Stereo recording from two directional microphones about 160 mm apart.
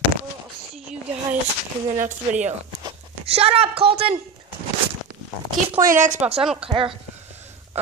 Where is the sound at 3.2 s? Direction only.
40° right (ahead or behind).